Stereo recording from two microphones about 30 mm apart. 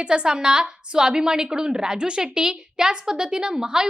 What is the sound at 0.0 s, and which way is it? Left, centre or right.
A woman's voice, right.